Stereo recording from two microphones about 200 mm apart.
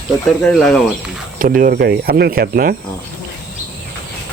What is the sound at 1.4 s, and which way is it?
Speech, 45° right (ahead or behind).